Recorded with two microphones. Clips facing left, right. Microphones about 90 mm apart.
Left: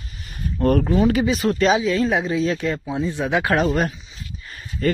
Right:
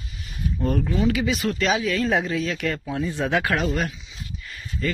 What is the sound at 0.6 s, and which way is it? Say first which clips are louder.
Speech: left 7 dB; 65° left (ahead or behind).